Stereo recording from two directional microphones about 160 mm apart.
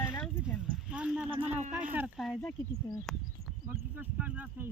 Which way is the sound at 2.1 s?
Centre (ahead or behind).